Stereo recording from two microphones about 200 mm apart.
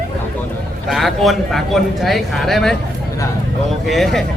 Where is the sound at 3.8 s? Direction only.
Centre (ahead or behind).